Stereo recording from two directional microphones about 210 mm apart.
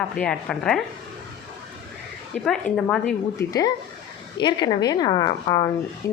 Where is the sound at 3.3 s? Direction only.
15° left (ahead or behind).